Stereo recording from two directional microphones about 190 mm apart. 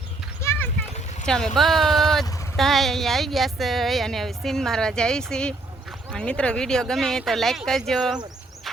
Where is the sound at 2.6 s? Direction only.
Centre (ahead or behind).